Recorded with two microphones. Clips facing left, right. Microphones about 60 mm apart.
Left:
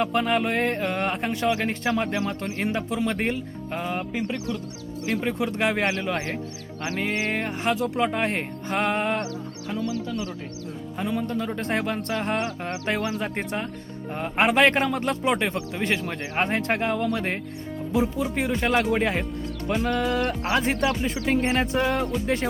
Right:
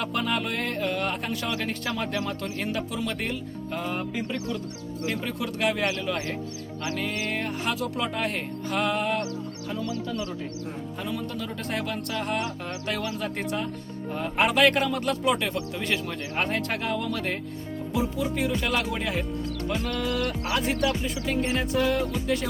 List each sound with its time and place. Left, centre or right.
0.0 s speech: left
5.2 s speech: left
10.9 s speech: left
19.6 s speech: left